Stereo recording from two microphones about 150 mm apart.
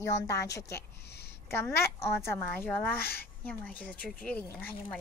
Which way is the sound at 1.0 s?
90° left.